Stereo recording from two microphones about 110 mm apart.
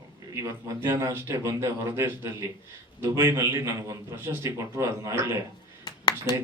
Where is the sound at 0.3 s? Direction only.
25° right (ahead or behind).